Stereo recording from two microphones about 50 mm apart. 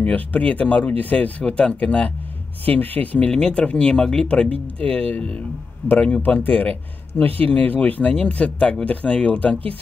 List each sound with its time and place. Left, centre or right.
0.0 s speech: left
2.6 s speech: left
3.3 s speech: centre
4.3 s speech: left
6.2 s speech: left